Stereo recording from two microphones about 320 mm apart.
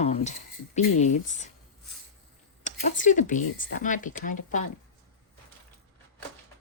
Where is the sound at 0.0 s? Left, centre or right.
Left.